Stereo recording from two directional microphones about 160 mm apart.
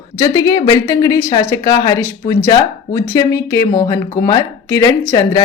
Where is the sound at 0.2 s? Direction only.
25° left (ahead or behind).